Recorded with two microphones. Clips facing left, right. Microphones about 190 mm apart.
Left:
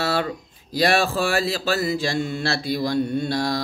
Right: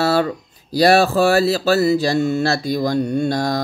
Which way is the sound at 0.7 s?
40° right (ahead or behind).